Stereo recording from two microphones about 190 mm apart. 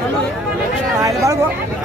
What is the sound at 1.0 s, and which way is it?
Speech, 15° right (ahead or behind).